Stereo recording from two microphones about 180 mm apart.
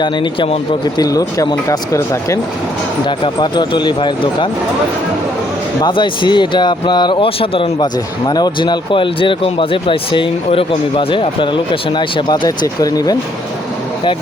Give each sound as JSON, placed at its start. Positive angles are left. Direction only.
{"t": 0.0, "sound": "speech", "side_deg": 30}
{"t": 1.0, "sound": "speech", "side_deg": 20}
{"t": 3.4, "sound": "speech", "side_deg": 25}
{"t": 5.8, "sound": "speech", "side_deg": 25}